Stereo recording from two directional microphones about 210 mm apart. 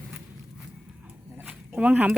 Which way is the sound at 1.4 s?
5° right (ahead or behind).